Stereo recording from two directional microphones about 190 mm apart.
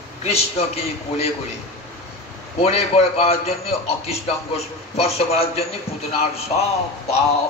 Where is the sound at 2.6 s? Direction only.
35° left (ahead or behind).